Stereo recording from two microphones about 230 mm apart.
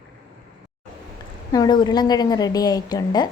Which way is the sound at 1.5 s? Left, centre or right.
Centre.